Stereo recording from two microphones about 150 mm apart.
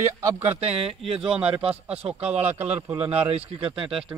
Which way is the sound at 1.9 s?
40° right (ahead or behind).